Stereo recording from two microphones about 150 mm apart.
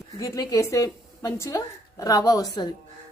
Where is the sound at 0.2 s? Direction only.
25° left (ahead or behind).